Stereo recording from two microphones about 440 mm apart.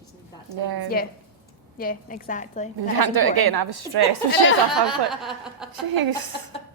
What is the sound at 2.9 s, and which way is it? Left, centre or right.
A woman's voice, right.